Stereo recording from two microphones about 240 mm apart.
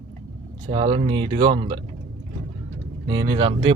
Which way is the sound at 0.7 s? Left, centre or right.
Right.